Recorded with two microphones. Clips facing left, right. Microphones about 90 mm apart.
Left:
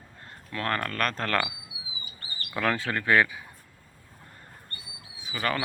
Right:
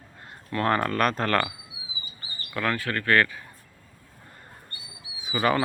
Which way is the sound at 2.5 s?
15° left (ahead or behind).